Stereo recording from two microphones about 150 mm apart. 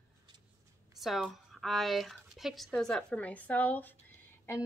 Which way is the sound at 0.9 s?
Centre (ahead or behind).